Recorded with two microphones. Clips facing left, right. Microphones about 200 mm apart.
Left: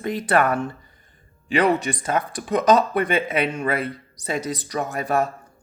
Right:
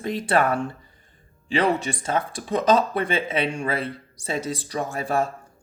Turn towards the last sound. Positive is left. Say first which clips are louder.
# left 2 dB
turn(degrees=-30)  # may be behind; listen again after turning